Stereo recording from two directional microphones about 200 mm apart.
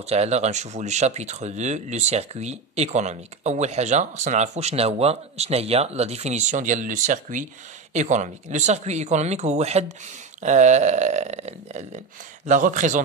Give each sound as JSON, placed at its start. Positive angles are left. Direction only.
{"t": 0.0, "sound": "speech", "side_deg": -30}